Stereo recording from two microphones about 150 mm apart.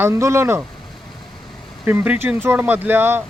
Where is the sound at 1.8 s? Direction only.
10° right (ahead or behind).